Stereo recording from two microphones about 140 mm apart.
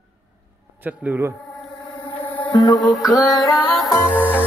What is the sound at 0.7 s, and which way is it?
Speech, 10° right (ahead or behind).